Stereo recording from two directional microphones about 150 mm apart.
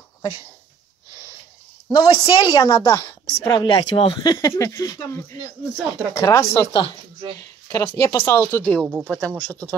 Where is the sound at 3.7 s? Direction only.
35° left (ahead or behind); by 6.7 s 20° left (ahead or behind).